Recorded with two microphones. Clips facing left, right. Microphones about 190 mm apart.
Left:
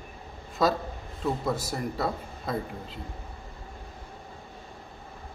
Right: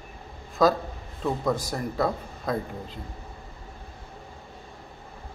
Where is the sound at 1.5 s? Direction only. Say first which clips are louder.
Right 3 dB; 5° left (ahead or behind).